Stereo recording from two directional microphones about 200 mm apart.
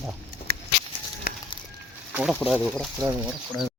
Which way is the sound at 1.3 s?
50° left (ahead or behind).